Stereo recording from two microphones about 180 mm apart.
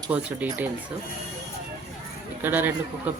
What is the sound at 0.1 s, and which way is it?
Speech, 10° right (ahead or behind).